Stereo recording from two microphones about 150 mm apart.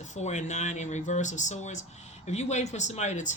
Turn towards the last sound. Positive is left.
turn(degrees=50)  # may be behind; listen again after turning